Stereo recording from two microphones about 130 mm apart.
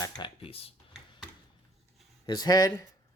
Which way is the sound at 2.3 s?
30° left (ahead or behind).